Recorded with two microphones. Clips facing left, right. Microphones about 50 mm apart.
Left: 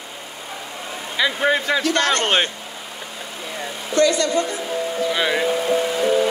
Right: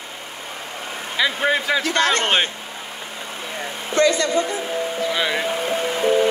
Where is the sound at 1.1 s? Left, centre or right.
Centre.